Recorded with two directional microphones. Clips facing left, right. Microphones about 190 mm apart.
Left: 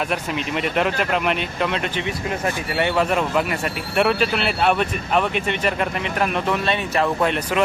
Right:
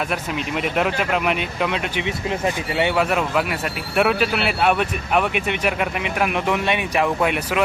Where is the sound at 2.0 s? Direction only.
15° right (ahead or behind).